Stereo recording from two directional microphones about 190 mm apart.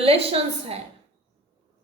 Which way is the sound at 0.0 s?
30° right (ahead or behind).